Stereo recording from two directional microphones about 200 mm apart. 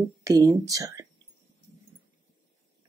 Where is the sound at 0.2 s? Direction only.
15° right (ahead or behind).